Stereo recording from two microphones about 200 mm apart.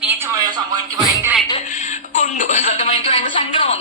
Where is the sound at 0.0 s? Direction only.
10° right (ahead or behind).